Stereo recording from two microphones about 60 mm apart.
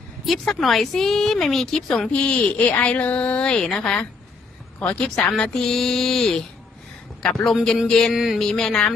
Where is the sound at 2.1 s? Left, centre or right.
Left; by 6.3 s centre.